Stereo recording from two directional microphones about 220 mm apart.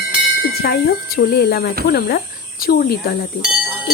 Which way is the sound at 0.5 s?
45° left (ahead or behind).